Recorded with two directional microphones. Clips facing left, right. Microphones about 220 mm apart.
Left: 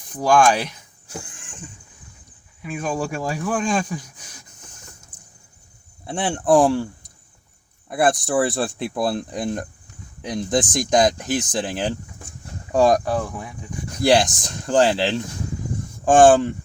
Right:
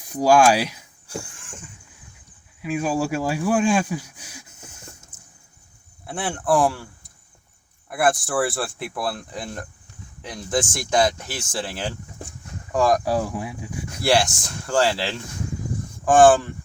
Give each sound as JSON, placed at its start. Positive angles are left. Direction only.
{"t": 0.1, "sound": "speech", "side_deg": -10}
{"t": 2.6, "sound": "speech", "side_deg": -10}
{"t": 6.1, "sound": "speech", "side_deg": 20}
{"t": 7.9, "sound": "speech", "side_deg": 20}
{"t": 13.1, "sound": "speech", "side_deg": -10}
{"t": 14.0, "sound": "speech", "side_deg": 20}